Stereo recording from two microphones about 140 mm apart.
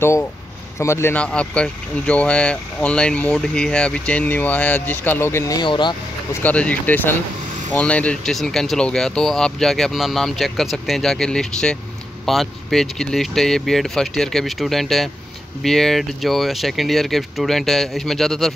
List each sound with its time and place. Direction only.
0.0 s speech: 20° left (ahead or behind)
6.4 s speech: 10° left (ahead or behind)